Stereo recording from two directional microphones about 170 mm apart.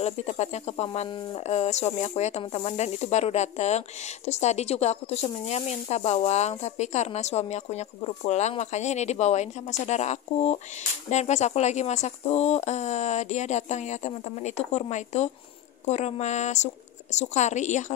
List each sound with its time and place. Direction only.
0.0 s a woman's voice: 40° left (ahead or behind)